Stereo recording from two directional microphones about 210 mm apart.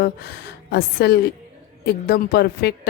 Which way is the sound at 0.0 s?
50° left (ahead or behind).